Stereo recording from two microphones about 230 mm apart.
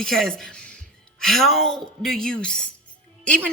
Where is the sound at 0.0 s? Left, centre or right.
Centre.